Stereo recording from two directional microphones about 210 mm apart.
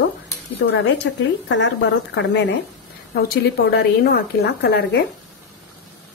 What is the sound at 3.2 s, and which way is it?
A woman's voice, 45° left (ahead or behind).